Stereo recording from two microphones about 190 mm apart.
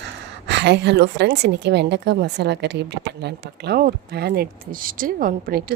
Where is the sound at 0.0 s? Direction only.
65° right (ahead or behind).